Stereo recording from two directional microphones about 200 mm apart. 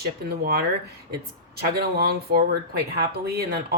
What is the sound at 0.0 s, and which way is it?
Speech, 50° right (ahead or behind).